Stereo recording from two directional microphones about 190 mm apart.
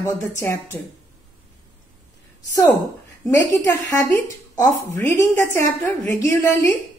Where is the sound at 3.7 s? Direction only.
15° left (ahead or behind).